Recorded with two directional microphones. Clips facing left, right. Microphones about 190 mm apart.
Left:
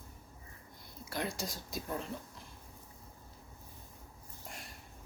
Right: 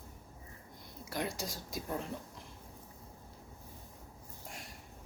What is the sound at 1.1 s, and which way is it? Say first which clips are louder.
Speech: even; 10° right (ahead or behind).